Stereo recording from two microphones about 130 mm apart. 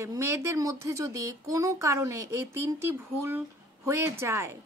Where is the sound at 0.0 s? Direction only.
20° right (ahead or behind).